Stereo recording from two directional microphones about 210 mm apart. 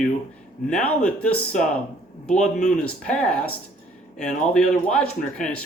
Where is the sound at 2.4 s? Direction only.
35° left (ahead or behind).